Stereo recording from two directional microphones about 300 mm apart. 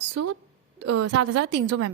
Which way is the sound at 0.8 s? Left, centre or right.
Right.